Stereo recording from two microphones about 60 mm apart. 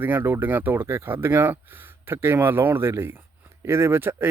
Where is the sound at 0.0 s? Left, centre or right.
Right.